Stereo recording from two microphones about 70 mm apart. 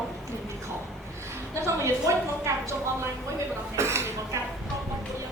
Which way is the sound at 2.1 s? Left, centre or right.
Right.